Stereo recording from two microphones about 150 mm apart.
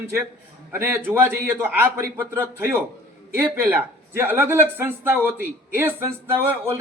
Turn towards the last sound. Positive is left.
turn(degrees=-15)  # may be behind; listen again after turning